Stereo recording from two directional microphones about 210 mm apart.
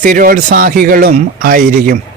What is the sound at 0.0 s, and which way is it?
A man's voice, 40° right (ahead or behind).